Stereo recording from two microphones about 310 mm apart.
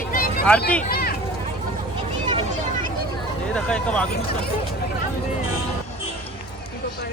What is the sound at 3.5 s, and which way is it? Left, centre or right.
Speech, centre.